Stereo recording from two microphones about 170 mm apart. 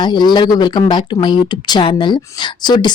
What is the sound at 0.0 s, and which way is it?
Speech, 25° left (ahead or behind).